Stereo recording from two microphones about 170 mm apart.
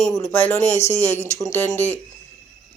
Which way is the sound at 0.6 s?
40° left (ahead or behind).